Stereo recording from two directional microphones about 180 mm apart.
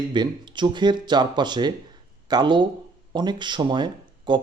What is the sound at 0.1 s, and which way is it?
Speech, 25° right (ahead or behind).